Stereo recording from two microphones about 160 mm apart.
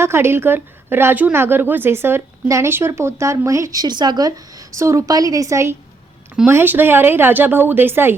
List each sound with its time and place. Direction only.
0.0 s a woman's voice: 15° right (ahead or behind)